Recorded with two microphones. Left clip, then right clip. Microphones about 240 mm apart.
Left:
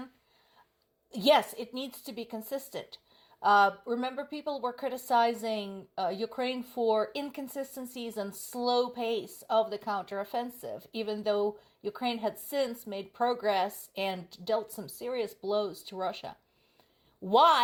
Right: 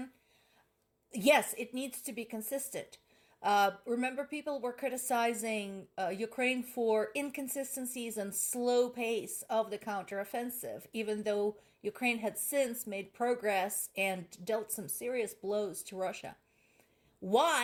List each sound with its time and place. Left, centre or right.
1.1 s a woman's voice: left